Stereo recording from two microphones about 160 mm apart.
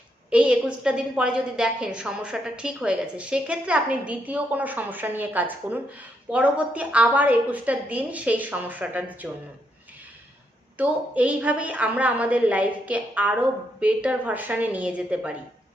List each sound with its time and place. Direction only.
0.3 s a woman's voice: 5° right (ahead or behind)
10.8 s a woman's voice: 10° right (ahead or behind)